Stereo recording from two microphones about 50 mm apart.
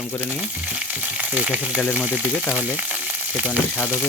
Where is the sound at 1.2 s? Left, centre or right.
Right.